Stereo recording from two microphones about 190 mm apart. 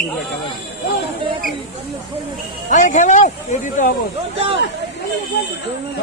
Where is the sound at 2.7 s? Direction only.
40° left (ahead or behind).